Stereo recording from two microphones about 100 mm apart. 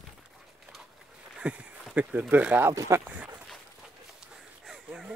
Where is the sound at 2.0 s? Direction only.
15° right (ahead or behind).